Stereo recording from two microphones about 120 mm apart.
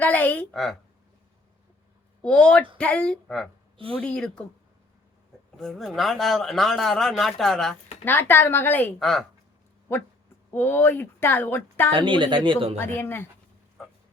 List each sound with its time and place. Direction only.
0.0 s a woman's voice: 15° left (ahead or behind)
0.5 s speech: centre (ahead or behind)
2.2 s a woman's voice: 5° left (ahead or behind)
5.5 s speech: centre (ahead or behind)
8.0 s a woman's voice: 15° left (ahead or behind)
9.0 s speech: centre (ahead or behind)
10.5 s a woman's voice: 15° left (ahead or behind)
11.9 s speech: 40° right (ahead or behind)
12.7 s a woman's voice: 15° left (ahead or behind)